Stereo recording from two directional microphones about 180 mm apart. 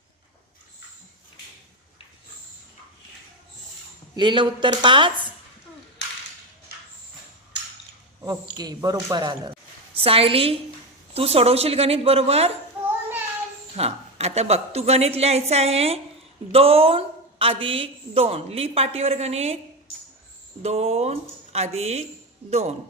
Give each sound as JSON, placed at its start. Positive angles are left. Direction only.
{"t": 4.1, "sound": "speech", "side_deg": -25}
{"t": 8.2, "sound": "a woman's voice", "side_deg": -20}
{"t": 13.7, "sound": "a woman's voice", "side_deg": -35}
{"t": 20.6, "sound": "a woman's voice", "side_deg": -35}